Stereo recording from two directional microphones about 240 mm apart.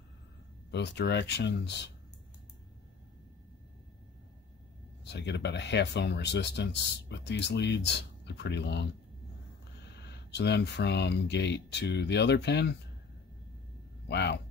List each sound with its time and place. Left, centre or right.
0.7 s speech: left
5.0 s speech: left
10.0 s speech: left
14.0 s speech: left